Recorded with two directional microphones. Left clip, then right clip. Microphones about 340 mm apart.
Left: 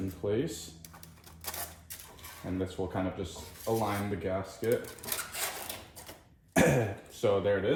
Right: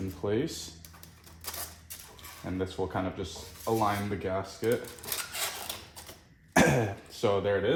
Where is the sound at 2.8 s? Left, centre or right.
Centre.